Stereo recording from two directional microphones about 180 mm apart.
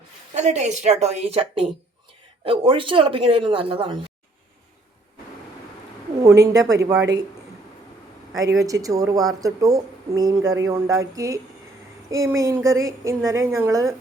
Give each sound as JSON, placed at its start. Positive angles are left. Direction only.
{"t": 0.3, "sound": "a woman's voice", "side_deg": -40}
{"t": 6.2, "sound": "a woman's voice", "side_deg": -15}
{"t": 8.5, "sound": "a woman's voice", "side_deg": -20}